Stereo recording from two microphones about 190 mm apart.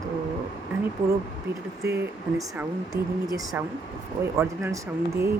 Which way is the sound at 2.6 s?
20° right (ahead or behind).